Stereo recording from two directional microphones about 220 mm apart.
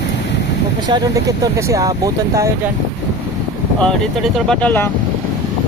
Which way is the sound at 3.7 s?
5° left (ahead or behind).